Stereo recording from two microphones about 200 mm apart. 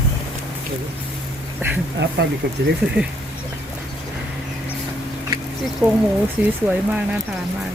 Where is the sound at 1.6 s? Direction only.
10° right (ahead or behind).